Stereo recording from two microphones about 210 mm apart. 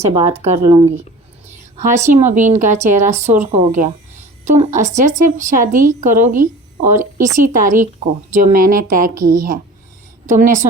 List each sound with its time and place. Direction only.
0.0 s speech: 25° right (ahead or behind)
1.8 s speech: 35° right (ahead or behind)